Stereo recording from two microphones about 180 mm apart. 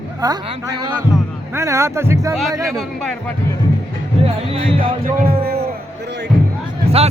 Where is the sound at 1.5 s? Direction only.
15° right (ahead or behind).